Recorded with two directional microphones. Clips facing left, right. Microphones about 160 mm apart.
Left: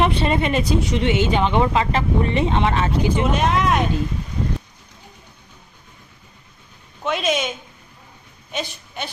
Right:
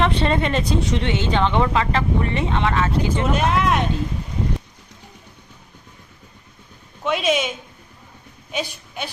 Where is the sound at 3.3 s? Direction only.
Centre (ahead or behind).